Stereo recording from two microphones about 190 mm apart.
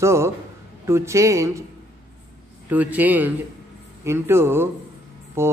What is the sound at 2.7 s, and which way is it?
A man's voice, 10° right (ahead or behind).